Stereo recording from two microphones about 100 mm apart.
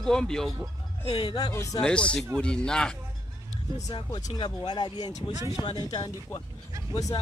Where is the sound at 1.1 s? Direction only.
65° left (ahead or behind).